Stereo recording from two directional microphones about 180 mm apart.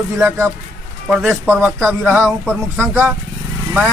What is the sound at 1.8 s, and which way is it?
Speech, 5° left (ahead or behind).